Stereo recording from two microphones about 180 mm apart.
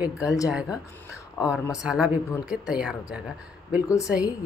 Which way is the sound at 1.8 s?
5° right (ahead or behind).